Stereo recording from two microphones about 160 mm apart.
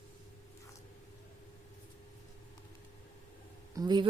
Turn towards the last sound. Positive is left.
turn(degrees=-25)  # may be behind; listen again after turning